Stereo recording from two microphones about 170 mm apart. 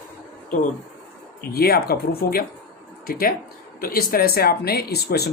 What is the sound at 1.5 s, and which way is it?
Speech, 65° left (ahead or behind).